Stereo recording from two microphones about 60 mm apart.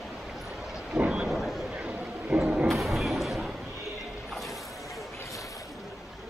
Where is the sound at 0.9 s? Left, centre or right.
Centre.